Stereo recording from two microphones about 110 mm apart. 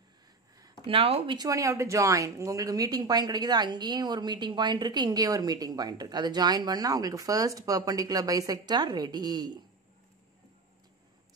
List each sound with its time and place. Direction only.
0.8 s speech: 60° right (ahead or behind)
1.3 s speech: 35° right (ahead or behind)